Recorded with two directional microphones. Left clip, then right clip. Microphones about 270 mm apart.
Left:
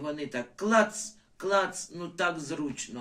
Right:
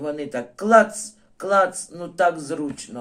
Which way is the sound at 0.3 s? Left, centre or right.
Right.